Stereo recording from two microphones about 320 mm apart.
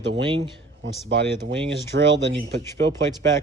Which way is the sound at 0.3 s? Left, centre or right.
Centre.